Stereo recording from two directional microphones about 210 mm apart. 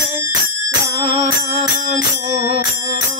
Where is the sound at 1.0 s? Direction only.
25° right (ahead or behind).